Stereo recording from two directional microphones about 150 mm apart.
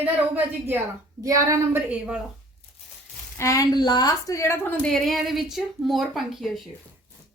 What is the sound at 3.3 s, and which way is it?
A woman's voice, 20° left (ahead or behind).